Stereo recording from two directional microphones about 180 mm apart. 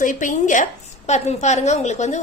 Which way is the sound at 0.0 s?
45° left (ahead or behind).